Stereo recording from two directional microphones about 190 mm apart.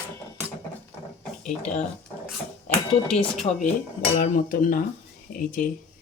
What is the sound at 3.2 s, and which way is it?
Speech, 35° left (ahead or behind).